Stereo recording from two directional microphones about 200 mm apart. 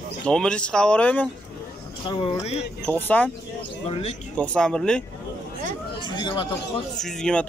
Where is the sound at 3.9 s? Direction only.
30° left (ahead or behind).